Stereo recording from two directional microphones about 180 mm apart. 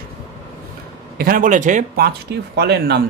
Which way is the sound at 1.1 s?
50° right (ahead or behind).